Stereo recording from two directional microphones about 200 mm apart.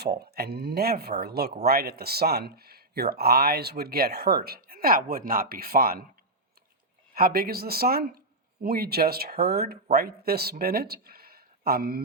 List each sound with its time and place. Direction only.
0.0 s speech: 55° right (ahead or behind)
7.1 s speech: 45° right (ahead or behind)